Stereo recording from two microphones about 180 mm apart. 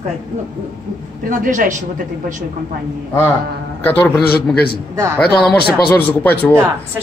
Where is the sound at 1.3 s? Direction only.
50° right (ahead or behind).